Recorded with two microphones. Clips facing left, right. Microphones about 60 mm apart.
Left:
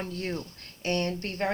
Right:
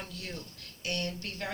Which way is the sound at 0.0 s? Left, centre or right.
Left.